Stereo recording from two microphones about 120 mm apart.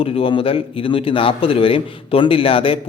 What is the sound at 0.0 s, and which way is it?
A man's voice, 45° left (ahead or behind).